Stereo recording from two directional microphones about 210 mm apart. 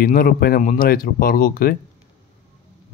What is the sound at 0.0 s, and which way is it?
Speech, 45° left (ahead or behind).